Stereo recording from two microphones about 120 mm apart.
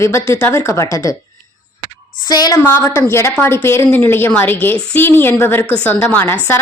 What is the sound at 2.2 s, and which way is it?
Speech, 35° left (ahead or behind).